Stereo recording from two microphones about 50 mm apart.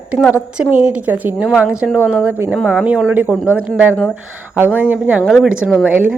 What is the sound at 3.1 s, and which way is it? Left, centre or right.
Speech, right.